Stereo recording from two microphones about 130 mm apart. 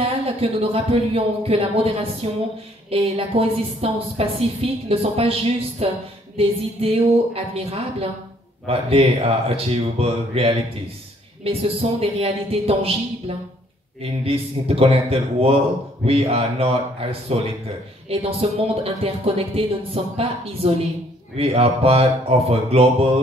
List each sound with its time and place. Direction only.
0.4 s speech: 50° right (ahead or behind)
14.0 s speech: 45° right (ahead or behind)